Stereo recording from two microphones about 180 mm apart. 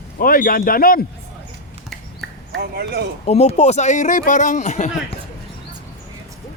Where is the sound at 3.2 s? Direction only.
35° left (ahead or behind).